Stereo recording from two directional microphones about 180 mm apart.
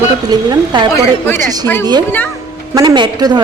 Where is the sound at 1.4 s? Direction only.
20° right (ahead or behind).